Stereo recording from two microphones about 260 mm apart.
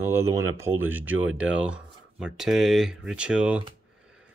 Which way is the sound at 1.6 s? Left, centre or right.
Centre.